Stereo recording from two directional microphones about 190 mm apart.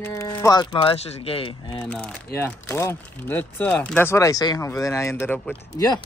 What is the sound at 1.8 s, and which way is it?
Speech, 5° left (ahead or behind).